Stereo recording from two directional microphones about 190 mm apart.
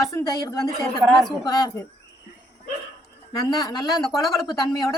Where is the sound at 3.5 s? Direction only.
20° left (ahead or behind).